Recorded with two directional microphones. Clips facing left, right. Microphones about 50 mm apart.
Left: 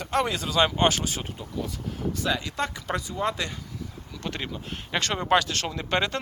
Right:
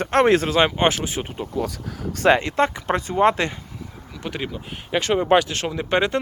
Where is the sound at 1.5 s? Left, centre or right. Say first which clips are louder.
Right 7 dB; right.